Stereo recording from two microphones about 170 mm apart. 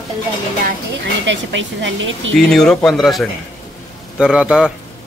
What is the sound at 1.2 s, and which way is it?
Speech, 90° right.